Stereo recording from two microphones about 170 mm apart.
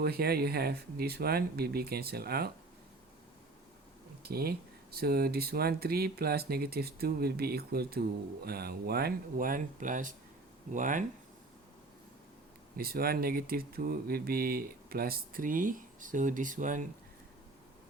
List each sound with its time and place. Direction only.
0.0 s speech: 65° right (ahead or behind)
4.2 s speech: 65° right (ahead or behind)
12.7 s speech: 60° right (ahead or behind)